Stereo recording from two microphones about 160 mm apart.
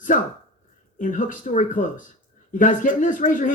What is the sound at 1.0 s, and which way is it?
Speech, 55° left (ahead or behind).